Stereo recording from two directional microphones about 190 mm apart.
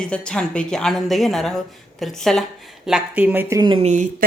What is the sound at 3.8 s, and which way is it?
Speech, 40° right (ahead or behind).